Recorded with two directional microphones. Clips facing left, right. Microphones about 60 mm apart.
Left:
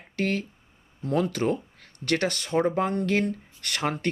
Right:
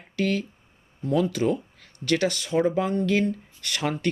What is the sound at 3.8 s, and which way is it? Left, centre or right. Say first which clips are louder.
Speech: even; left.